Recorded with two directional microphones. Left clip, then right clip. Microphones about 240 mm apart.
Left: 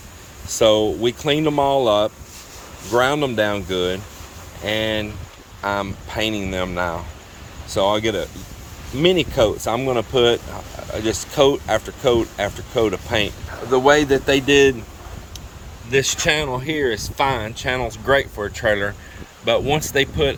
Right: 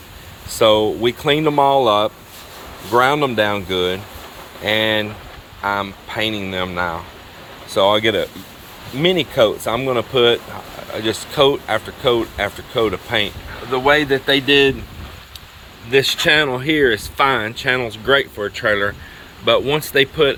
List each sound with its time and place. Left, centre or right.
0.6 s speech: centre
16.2 s speech: centre